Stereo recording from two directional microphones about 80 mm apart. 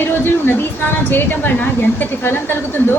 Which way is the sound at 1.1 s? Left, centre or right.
Left.